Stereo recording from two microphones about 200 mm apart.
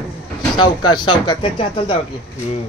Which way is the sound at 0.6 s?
25° left (ahead or behind).